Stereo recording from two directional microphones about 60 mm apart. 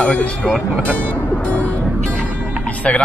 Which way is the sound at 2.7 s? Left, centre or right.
Left.